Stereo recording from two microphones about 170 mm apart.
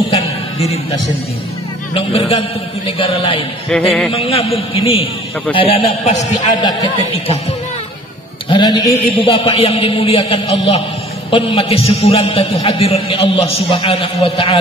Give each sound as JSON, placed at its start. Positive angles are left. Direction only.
{"t": 0.1, "sound": "a sound", "side_deg": 35}
{"t": 2.0, "sound": "a man's voice", "side_deg": 35}
{"t": 6.4, "sound": "speech", "side_deg": 25}
{"t": 8.5, "sound": "a man's voice", "side_deg": 25}